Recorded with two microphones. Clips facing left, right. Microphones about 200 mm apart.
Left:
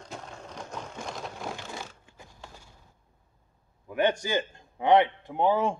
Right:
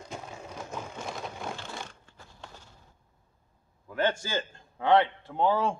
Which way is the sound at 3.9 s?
15° left (ahead or behind).